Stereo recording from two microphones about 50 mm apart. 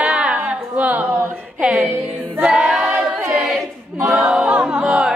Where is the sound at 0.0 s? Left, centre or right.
Right.